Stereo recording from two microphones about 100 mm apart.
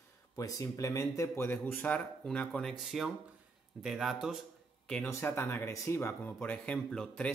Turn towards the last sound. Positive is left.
turn(degrees=10)  # may be behind; listen again after turning